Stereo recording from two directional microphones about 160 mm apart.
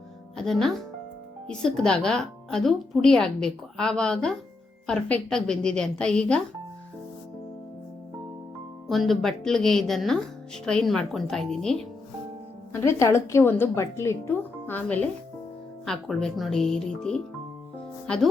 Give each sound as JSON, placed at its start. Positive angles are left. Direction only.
{"t": 0.3, "sound": "speech", "side_deg": 0}
{"t": 8.9, "sound": "speech", "side_deg": 0}
{"t": 12.7, "sound": "a woman's voice", "side_deg": 15}